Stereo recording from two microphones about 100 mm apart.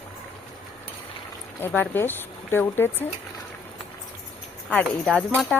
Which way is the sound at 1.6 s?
20° left (ahead or behind).